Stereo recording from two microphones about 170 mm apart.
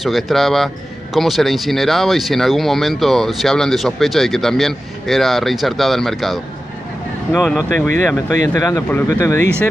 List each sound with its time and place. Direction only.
0.0 s speech: centre (ahead or behind)
7.4 s speech: 5° left (ahead or behind)
8.5 s speech: 20° left (ahead or behind)